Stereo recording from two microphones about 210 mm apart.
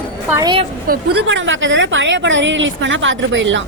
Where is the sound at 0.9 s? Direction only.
55° right (ahead or behind).